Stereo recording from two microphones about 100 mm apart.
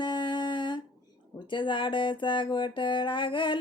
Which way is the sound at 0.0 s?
50° left (ahead or behind).